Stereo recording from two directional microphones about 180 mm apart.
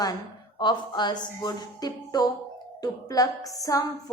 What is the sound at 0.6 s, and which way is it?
A woman's voice, 25° left (ahead or behind).